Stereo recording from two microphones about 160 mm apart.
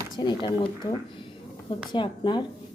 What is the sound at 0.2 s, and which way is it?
A woman's voice, 25° left (ahead or behind).